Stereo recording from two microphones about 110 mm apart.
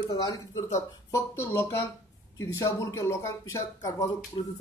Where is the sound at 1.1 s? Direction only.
25° left (ahead or behind).